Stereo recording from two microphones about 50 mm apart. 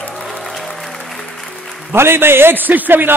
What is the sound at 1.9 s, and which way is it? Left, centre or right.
A man's voice, right.